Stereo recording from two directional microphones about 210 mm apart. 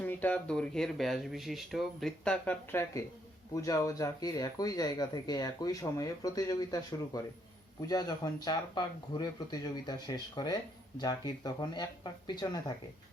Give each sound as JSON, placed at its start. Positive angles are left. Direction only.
{"t": 0.0, "sound": "speech", "side_deg": 10}